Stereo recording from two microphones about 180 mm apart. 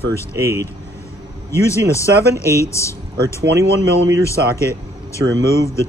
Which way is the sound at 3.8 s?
80° right.